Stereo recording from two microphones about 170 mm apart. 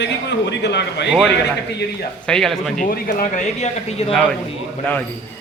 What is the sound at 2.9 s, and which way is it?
Speech, 50° left (ahead or behind).